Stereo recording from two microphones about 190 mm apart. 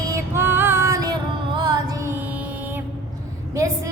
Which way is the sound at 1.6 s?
20° right (ahead or behind).